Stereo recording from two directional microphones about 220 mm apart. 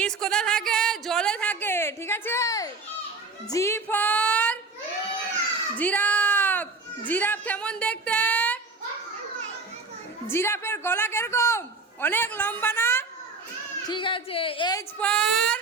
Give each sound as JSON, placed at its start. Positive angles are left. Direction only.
{"t": 0.0, "sound": "a sound", "side_deg": 5}
{"t": 3.5, "sound": "female singing", "side_deg": 10}
{"t": 5.7, "sound": "a sound", "side_deg": 5}
{"t": 10.2, "sound": "a man's voice", "side_deg": 10}
{"t": 13.8, "sound": "a woman's voice", "side_deg": 20}
{"t": 14.9, "sound": "speech", "side_deg": 5}